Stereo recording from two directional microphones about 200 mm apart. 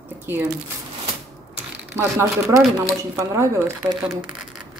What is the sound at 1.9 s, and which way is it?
Speech, 15° right (ahead or behind).